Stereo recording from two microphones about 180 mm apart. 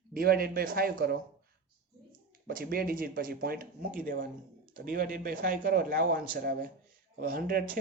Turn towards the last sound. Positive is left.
turn(degrees=-50)  # may be behind; listen again after turning